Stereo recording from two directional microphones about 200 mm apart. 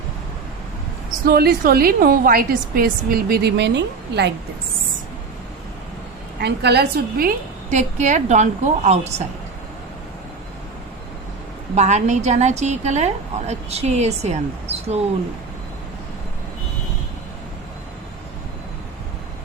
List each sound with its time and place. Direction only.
1.2 s a woman's voice: 50° right (ahead or behind)
6.4 s a woman's voice: 55° right (ahead or behind); by 9.2 s 35° right (ahead or behind)
11.7 s a woman's voice: 35° right (ahead or behind)